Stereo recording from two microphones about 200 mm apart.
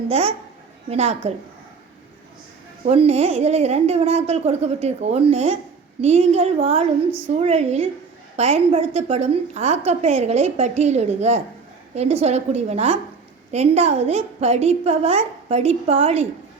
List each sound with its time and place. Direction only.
0.1 s a woman's voice: 30° right (ahead or behind)
2.8 s a woman's voice: 30° right (ahead or behind)